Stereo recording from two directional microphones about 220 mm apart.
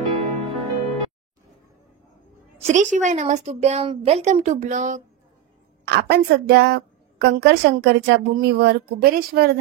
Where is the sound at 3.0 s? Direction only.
35° right (ahead or behind).